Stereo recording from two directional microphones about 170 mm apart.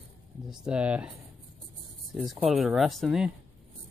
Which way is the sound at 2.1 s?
Centre (ahead or behind).